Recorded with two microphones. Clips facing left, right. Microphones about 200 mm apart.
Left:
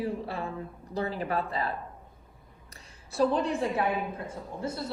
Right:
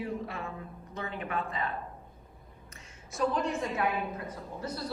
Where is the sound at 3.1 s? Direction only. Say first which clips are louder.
Left 4 dB; 35° left (ahead or behind).